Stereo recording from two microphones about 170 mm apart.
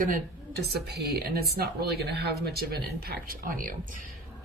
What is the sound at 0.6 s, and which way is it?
Speech, 75° right (ahead or behind).